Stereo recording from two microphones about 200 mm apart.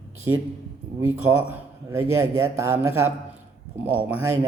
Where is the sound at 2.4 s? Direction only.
10° right (ahead or behind).